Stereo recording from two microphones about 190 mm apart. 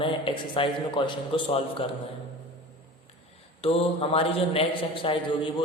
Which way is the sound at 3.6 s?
30° left (ahead or behind).